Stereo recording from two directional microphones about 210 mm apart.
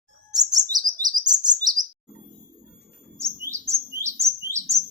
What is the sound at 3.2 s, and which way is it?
Bird, 15° right (ahead or behind).